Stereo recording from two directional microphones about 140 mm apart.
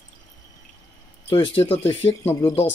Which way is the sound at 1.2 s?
40° left (ahead or behind).